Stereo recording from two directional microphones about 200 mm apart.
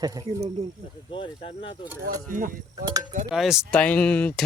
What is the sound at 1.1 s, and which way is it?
Speech, 25° left (ahead or behind).